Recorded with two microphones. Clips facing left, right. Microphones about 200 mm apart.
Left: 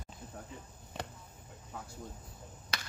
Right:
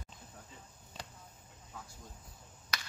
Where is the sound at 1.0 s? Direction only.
65° left (ahead or behind).